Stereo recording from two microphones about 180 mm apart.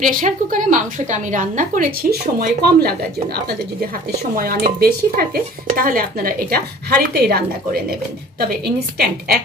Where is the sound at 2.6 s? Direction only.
60° right (ahead or behind).